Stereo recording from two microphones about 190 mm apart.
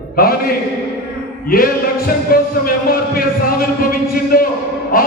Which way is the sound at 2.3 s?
50° left (ahead or behind).